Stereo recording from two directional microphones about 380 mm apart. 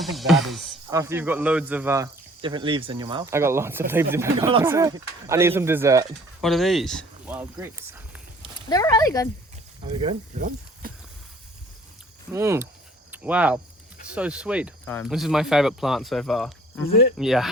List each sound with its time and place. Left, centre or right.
0.0 s speech: centre
8.7 s speech: centre
9.9 s speech: centre
12.3 s speech: centre
16.9 s speech: left
17.2 s speech: centre